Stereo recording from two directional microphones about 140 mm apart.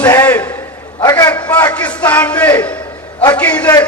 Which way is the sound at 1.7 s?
10° left (ahead or behind).